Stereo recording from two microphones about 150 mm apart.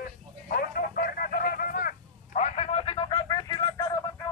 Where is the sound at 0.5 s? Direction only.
75° left (ahead or behind); by 3.1 s 40° left (ahead or behind).